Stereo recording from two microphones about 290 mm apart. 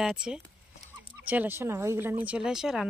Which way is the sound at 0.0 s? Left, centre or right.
Centre.